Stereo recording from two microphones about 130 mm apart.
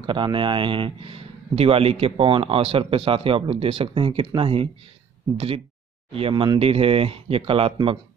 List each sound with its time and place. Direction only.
0.0 s speech: 40° right (ahead or behind)
6.1 s speech: 40° right (ahead or behind)